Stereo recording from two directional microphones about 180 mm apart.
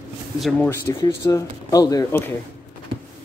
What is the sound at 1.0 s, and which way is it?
Speech, 20° left (ahead or behind).